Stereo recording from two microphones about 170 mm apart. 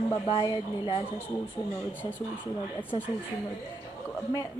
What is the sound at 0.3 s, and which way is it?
Speech, 25° left (ahead or behind).